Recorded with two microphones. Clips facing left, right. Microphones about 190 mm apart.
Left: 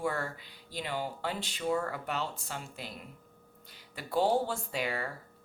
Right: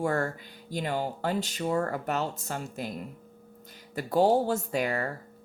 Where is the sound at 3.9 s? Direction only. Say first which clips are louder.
Right 5 dB; 45° right (ahead or behind).